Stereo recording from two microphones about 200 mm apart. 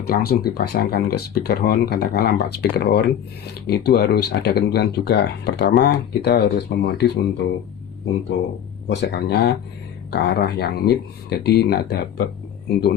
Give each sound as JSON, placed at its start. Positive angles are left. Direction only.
{"t": 0.1, "sound": "speech", "side_deg": 50}
{"t": 8.9, "sound": "speech", "side_deg": 55}